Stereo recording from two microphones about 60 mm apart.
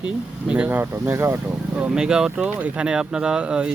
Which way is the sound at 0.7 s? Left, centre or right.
Right.